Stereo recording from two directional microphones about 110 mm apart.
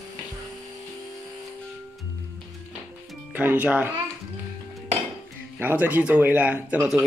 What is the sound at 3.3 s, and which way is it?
Speech, 15° right (ahead or behind).